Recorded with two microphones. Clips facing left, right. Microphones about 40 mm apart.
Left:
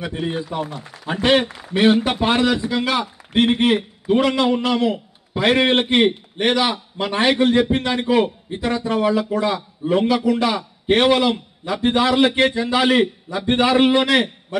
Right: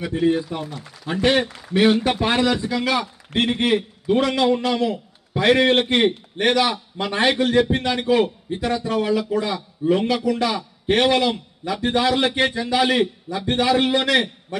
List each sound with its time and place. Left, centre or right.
0.0 s a man's voice: left
2.3 s a man's voice: centre; by 10.6 s left
10.9 s a man's voice: centre; by 12.4 s left
12.4 s a man's voice: centre